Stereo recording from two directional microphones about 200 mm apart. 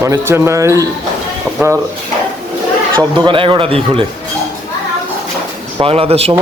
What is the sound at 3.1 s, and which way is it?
Speech, 25° right (ahead or behind).